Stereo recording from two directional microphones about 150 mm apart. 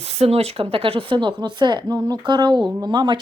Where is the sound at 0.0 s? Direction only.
45° right (ahead or behind).